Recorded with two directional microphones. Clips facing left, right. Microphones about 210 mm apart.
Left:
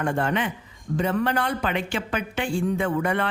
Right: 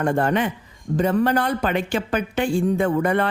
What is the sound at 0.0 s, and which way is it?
Speech, 40° right (ahead or behind).